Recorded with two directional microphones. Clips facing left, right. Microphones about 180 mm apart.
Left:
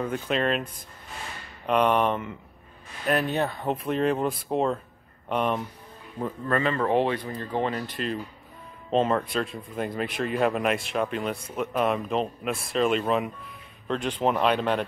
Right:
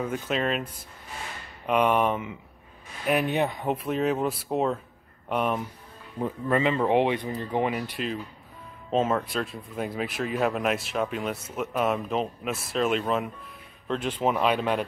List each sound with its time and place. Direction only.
0.0 s speech: 5° right (ahead or behind)
1.7 s speech: 5° right (ahead or behind)
3.2 s speech: 15° right (ahead or behind)
3.7 s speech: 5° right (ahead or behind)
6.2 s speech: 15° right (ahead or behind)